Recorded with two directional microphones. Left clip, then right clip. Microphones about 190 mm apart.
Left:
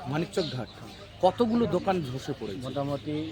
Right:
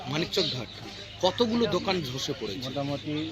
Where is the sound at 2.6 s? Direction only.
15° left (ahead or behind).